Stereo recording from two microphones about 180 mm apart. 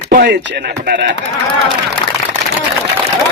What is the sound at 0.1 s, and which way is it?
A man's voice, 70° right (ahead or behind).